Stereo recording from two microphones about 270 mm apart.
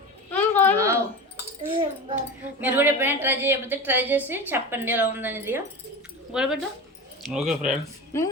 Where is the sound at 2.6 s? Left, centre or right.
Centre.